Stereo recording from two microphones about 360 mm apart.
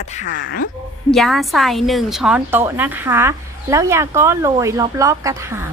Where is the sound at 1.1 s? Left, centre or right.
Centre.